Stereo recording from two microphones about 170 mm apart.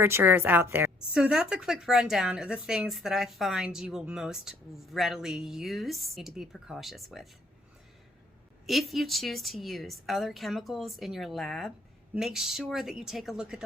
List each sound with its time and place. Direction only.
0.0 s a woman's voice: 15° right (ahead or behind)
8.6 s a woman's voice: centre (ahead or behind)